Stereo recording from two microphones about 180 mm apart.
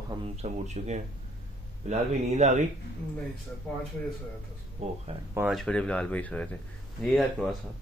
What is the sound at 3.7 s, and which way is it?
Speech, centre (ahead or behind).